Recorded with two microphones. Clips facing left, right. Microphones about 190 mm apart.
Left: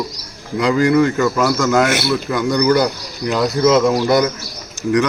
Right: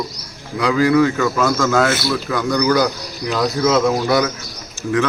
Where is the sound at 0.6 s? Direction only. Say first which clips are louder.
Left 1 dB; 20° left (ahead or behind).